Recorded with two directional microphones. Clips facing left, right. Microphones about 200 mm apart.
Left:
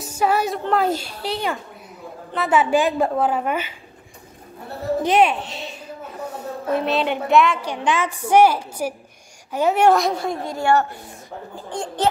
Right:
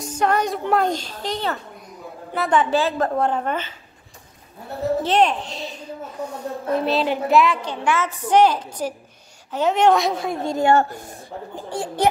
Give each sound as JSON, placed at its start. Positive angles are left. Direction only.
{"t": 0.0, "sound": "a sound", "side_deg": 5}
{"t": 0.7, "sound": "a woman's voice", "side_deg": 5}
{"t": 5.0, "sound": "a woman's voice", "side_deg": 10}
{"t": 7.6, "sound": "a woman's voice", "side_deg": 15}
{"t": 10.4, "sound": "a woman's voice", "side_deg": -25}
{"t": 11.5, "sound": "speech", "side_deg": -10}